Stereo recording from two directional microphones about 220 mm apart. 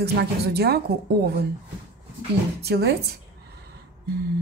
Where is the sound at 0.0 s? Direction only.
50° right (ahead or behind).